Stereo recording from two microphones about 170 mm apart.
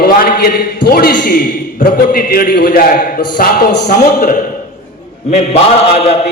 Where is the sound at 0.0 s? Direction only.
60° left (ahead or behind).